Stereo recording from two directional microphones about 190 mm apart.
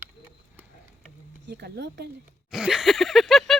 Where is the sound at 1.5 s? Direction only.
60° right (ahead or behind).